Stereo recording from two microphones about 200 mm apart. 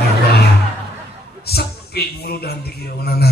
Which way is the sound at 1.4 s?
50° left (ahead or behind).